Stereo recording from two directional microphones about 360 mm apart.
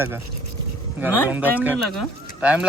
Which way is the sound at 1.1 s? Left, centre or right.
Centre.